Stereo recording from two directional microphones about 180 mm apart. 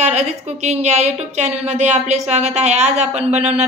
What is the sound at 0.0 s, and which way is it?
A woman's voice, 40° right (ahead or behind).